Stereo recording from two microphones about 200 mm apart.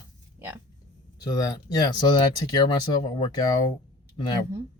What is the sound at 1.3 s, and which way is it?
Speech, 15° left (ahead or behind).